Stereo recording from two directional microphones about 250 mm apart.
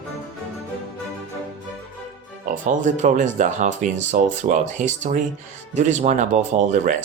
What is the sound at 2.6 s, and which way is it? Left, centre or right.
Speech, right.